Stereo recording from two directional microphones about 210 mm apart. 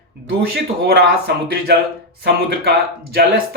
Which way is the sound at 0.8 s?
50° right (ahead or behind).